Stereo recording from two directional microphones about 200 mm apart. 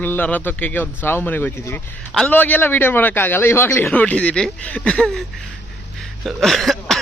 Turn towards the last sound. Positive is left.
turn(degrees=0)  # may be behind; listen again after turning